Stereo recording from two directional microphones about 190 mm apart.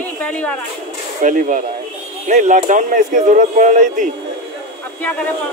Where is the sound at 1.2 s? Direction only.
40° right (ahead or behind).